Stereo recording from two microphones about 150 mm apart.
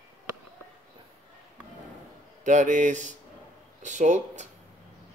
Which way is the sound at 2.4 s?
55° right (ahead or behind).